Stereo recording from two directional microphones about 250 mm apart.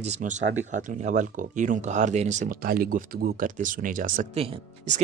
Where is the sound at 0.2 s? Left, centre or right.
Right.